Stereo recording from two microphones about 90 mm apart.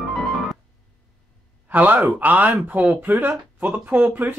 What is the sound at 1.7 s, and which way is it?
Speech, 20° right (ahead or behind).